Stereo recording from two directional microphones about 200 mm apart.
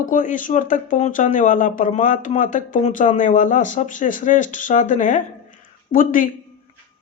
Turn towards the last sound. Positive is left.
turn(degrees=40)  # may be behind; listen again after turning